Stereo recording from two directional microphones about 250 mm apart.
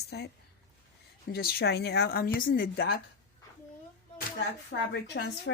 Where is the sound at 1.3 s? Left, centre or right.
Left.